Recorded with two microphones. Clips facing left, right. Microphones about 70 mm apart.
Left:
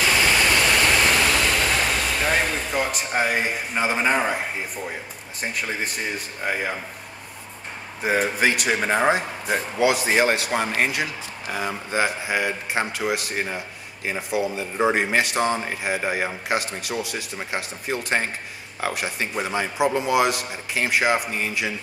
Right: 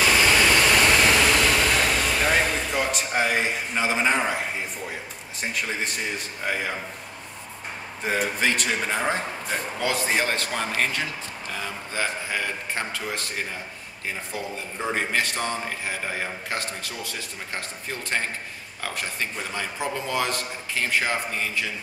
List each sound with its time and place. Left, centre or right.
0.0 s vehicle: centre
5.4 s speech: centre
8.0 s a man's voice: centre